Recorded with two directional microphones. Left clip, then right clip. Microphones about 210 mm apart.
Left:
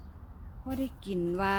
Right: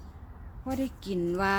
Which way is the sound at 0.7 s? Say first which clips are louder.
Right 3 dB; 10° left (ahead or behind).